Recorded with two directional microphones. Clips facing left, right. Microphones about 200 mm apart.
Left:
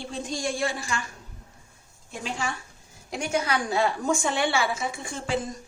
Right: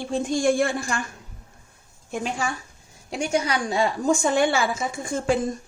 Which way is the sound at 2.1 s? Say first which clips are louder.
Right 5 dB; 55° right (ahead or behind).